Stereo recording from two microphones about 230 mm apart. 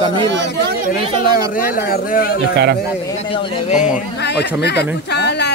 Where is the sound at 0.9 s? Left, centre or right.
Left.